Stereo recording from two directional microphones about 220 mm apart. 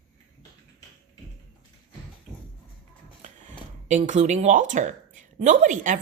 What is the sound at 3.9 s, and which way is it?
Speech, 35° right (ahead or behind).